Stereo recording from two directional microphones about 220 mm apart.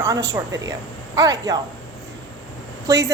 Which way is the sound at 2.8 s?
15° right (ahead or behind).